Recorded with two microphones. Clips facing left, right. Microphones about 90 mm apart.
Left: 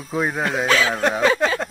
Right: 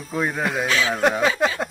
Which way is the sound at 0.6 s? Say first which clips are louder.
Left 5 dB; 55° left (ahead or behind).